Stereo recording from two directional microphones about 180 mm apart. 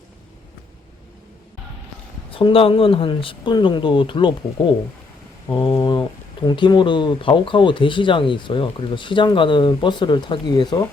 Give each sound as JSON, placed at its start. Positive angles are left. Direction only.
{"t": 2.3, "sound": "speech", "side_deg": 30}